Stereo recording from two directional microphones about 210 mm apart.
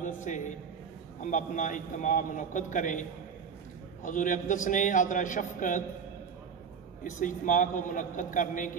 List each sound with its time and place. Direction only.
0.0 s a man's voice: 35° left (ahead or behind)
7.0 s a man's voice: 40° left (ahead or behind)